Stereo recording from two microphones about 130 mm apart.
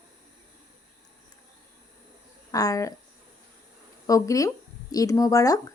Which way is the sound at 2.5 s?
25° left (ahead or behind).